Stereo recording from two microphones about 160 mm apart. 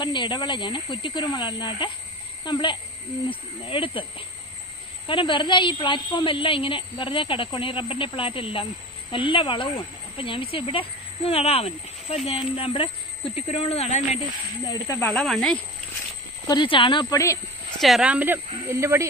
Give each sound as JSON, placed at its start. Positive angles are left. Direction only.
{"t": 0.0, "sound": "speech", "side_deg": 30}
{"t": 5.0, "sound": "speech", "side_deg": 30}
{"t": 14.7, "sound": "speech", "side_deg": 15}
{"t": 16.5, "sound": "speech", "side_deg": 30}
{"t": 17.7, "sound": "speech", "side_deg": 0}